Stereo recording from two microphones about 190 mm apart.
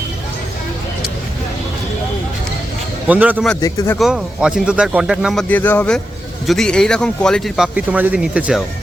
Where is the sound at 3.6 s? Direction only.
20° left (ahead or behind).